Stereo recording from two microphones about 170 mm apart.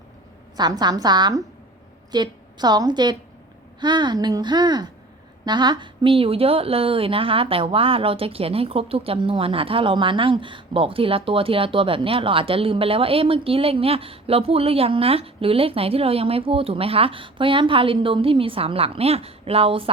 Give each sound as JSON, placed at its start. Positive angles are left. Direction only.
{"t": 0.5, "sound": "a woman's voice", "side_deg": -25}